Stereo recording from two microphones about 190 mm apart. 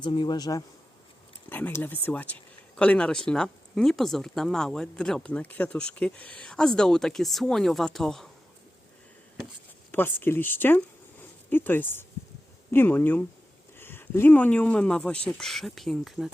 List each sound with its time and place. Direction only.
0.0 s speech: 25° left (ahead or behind)
1.5 s speech: 10° left (ahead or behind)
9.9 s speech: 10° left (ahead or behind)